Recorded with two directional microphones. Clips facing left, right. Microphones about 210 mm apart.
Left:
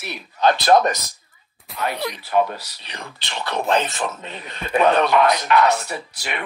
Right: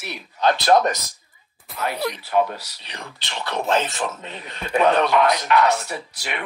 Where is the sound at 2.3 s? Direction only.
55° left (ahead or behind).